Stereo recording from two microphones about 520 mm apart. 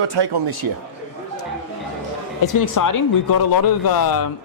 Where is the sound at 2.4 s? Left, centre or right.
Left.